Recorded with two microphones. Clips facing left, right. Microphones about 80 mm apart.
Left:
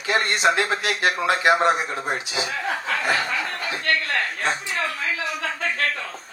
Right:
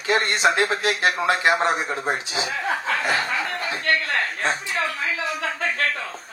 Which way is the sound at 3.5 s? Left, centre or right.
Right.